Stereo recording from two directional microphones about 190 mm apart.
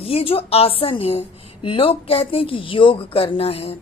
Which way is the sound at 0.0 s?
30° left (ahead or behind).